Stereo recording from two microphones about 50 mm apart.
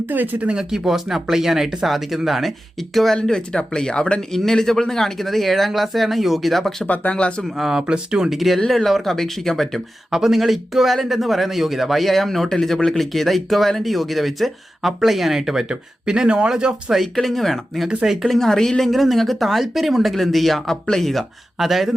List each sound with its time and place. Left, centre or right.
0.1 s speech: right
0.4 s a man's voice: centre
3.2 s a man's voice: centre
6.8 s speech: left
7.4 s speech: centre
8.3 s a man's voice: centre
10.1 s a man's voice: centre
17.2 s a man's voice: centre
17.8 s speech: centre
18.3 s a man's voice: centre